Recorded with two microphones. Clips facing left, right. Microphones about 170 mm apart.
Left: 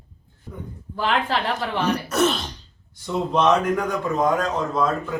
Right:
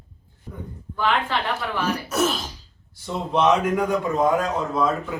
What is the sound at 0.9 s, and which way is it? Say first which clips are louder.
Speech: even; 35° left (ahead or behind).